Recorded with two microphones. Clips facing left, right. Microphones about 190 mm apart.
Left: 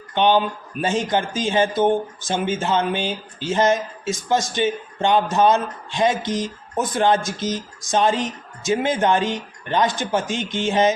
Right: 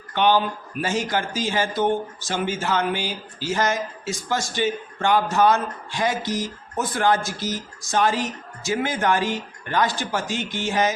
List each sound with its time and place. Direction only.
0.1 s a man's voice: 20° left (ahead or behind)